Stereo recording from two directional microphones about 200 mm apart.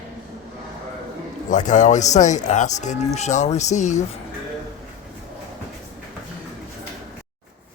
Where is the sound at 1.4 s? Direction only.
40° left (ahead or behind).